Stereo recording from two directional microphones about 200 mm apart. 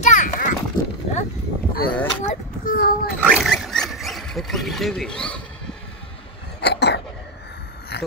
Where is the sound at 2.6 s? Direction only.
50° left (ahead or behind).